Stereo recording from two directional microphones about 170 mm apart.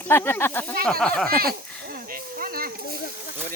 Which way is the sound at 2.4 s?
60° right (ahead or behind).